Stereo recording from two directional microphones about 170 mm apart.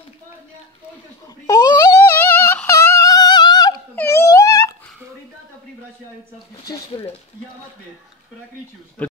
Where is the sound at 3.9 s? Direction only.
15° left (ahead or behind).